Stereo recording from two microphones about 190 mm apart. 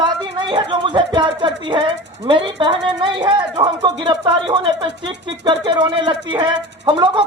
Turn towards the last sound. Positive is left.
turn(degrees=-25)  # may be behind; listen again after turning